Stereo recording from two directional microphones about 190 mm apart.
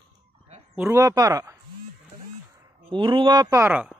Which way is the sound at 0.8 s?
15° right (ahead or behind).